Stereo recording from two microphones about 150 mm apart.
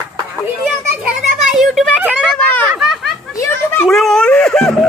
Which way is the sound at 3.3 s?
20° left (ahead or behind).